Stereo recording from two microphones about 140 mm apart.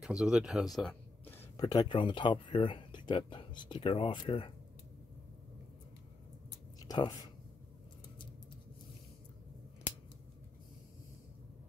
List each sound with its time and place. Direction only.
0.0 s speech: 5° right (ahead or behind)
1.2 s a sound: 15° left (ahead or behind)
1.7 s speech: 30° left (ahead or behind)